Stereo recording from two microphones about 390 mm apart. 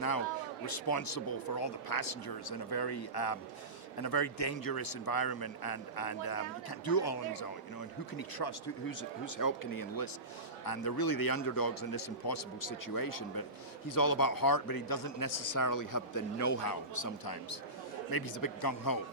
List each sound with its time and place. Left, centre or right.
0.6 s speech: left
4.5 s a man's voice: left
9.0 s a man's voice: left
18.1 s a man's voice: left